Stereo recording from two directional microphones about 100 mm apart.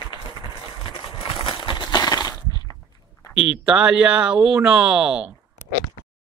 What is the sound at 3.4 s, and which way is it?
Speech, 10° right (ahead or behind).